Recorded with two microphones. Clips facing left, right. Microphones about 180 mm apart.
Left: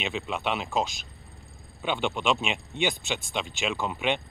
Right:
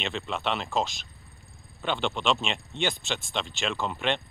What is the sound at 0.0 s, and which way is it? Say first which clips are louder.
Speech: left 1 dB; centre (ahead or behind).